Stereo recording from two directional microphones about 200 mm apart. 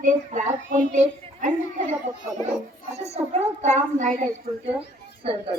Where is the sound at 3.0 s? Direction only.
35° right (ahead or behind).